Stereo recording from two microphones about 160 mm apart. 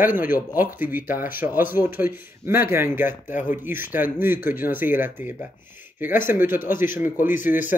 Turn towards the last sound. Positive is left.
turn(degrees=-10)  # may be behind; listen again after turning